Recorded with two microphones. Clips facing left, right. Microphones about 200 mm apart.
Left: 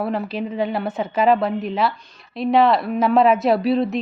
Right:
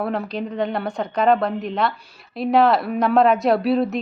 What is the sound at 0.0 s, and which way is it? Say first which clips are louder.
A woman's voice: left 1 dB; 5° left (ahead or behind).